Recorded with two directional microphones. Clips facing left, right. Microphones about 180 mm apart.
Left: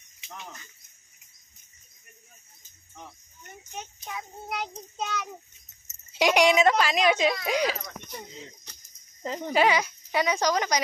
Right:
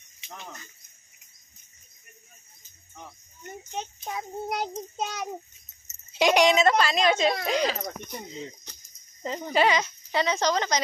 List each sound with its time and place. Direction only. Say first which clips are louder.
3.7 s child singing: right 4 dB; 35° right (ahead or behind)
6.1 s speech: right 1 dB; 10° left (ahead or behind)
9.2 s speech: left 1 dB; centre (ahead or behind)
9.6 s speech: even; 10° left (ahead or behind)